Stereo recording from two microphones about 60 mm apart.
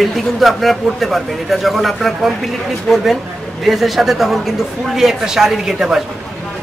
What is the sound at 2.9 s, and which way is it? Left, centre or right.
Speech, centre.